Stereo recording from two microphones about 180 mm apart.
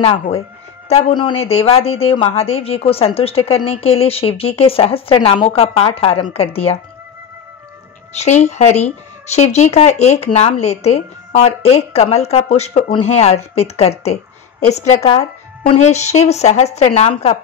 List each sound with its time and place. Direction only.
0.0 s speech: 35° left (ahead or behind)
8.1 s speech: 40° left (ahead or behind)